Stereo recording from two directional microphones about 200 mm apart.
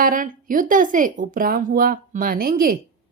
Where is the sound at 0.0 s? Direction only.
45° right (ahead or behind).